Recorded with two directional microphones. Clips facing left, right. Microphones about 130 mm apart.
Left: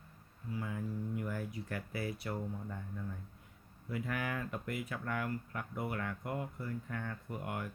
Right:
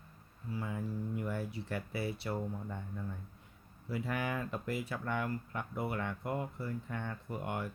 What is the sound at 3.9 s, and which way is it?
Speech, 30° right (ahead or behind).